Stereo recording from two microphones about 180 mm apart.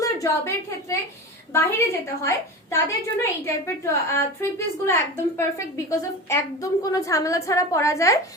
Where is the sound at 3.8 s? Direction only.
15° left (ahead or behind).